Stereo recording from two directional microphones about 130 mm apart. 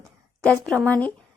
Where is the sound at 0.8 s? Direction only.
10° left (ahead or behind).